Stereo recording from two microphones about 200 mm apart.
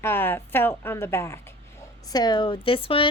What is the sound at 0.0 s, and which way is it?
A woman's voice, 10° left (ahead or behind).